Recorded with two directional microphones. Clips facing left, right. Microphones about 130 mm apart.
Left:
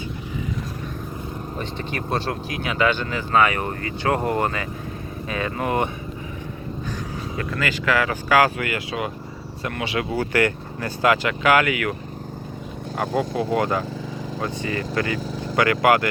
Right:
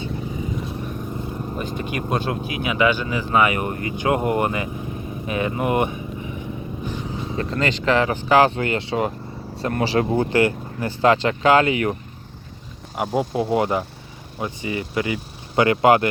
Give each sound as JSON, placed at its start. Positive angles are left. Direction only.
{"t": 1.5, "sound": "speech", "side_deg": -10}
{"t": 7.3, "sound": "speech", "side_deg": -30}
{"t": 10.1, "sound": "speech", "side_deg": -20}
{"t": 13.5, "sound": "speech", "side_deg": -20}